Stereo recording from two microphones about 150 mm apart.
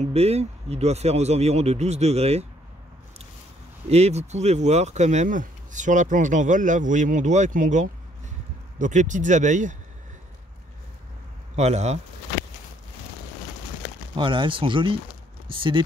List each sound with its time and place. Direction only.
0.0 s speech: 45° right (ahead or behind)
3.9 s speech: 45° right (ahead or behind)
11.5 s speech: 50° right (ahead or behind)
14.1 s speech: 35° right (ahead or behind)